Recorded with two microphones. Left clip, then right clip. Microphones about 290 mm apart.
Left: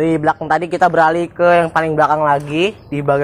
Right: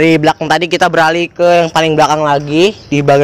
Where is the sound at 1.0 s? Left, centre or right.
Right.